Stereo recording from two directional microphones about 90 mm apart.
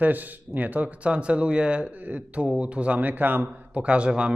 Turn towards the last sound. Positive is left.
turn(degrees=-10)  # may be behind; listen again after turning